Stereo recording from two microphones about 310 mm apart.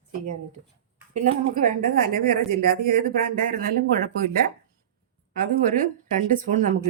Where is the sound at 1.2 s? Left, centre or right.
Right.